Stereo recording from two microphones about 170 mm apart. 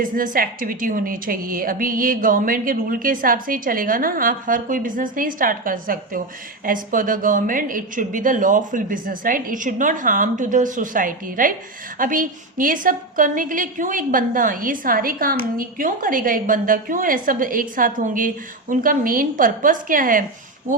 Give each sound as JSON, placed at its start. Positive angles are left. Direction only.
{"t": 0.3, "sound": "a woman's voice", "side_deg": -55}